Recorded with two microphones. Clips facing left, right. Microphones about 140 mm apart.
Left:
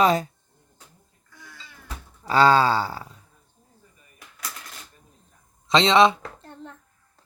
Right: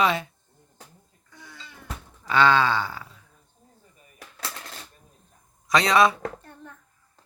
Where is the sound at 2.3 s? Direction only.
40° left (ahead or behind).